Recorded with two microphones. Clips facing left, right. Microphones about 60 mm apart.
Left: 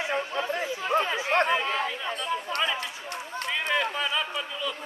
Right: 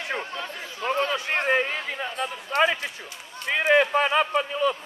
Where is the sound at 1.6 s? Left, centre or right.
Left.